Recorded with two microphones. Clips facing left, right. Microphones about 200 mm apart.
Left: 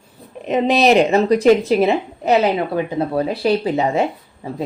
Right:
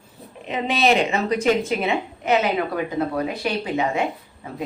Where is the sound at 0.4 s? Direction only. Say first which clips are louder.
Left 6 dB; 40° left (ahead or behind).